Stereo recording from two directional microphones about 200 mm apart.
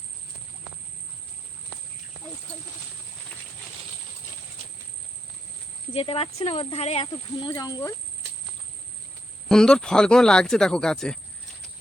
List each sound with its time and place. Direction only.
5.9 s speech: 30° left (ahead or behind)
9.5 s speech: 5° left (ahead or behind)